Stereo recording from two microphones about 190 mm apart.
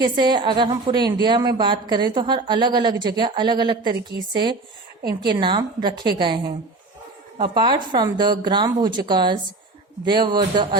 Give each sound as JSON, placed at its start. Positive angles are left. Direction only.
{"t": 0.0, "sound": "a woman's voice", "side_deg": -25}